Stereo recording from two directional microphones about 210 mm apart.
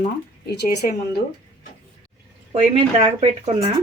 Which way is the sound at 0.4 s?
50° left (ahead or behind).